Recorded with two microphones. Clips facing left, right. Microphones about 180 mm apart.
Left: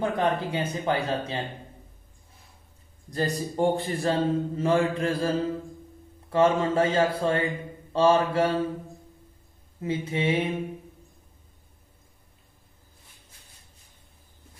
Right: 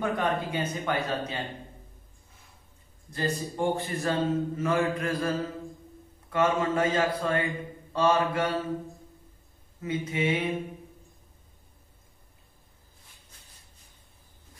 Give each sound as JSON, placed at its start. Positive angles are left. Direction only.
{"t": 0.2, "sound": "speech", "side_deg": 30}
{"t": 3.1, "sound": "a man's voice", "side_deg": 35}
{"t": 9.8, "sound": "speech", "side_deg": 30}